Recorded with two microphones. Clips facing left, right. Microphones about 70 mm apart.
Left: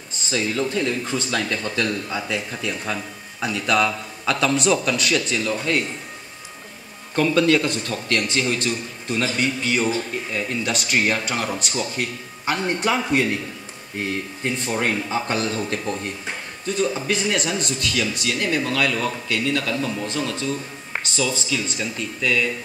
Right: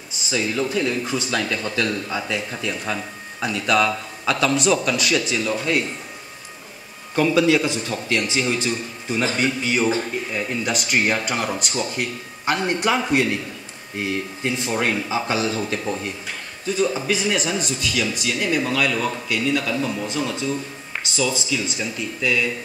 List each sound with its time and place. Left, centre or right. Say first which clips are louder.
0.3 s a man's voice: even; centre
2.5 s a man's voice: right 1 dB; centre
7.2 s a man's voice: right 1 dB; centre